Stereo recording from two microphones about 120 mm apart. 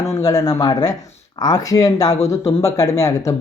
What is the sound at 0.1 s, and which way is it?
Speech, 30° left (ahead or behind).